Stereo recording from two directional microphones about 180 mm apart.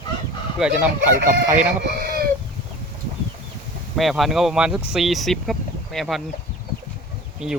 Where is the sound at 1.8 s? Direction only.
60° right (ahead or behind).